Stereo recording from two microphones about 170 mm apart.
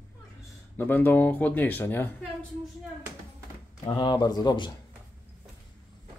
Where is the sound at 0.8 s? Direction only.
10° left (ahead or behind).